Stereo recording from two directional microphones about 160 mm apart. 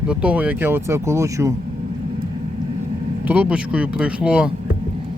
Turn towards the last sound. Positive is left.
turn(degrees=-5)  # may be behind; listen again after turning